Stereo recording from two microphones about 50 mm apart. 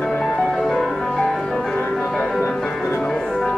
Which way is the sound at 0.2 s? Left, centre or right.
Centre.